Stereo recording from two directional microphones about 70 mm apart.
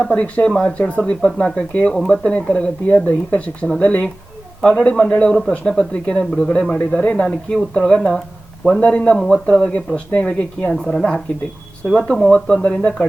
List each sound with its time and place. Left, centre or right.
0.0 s speech: centre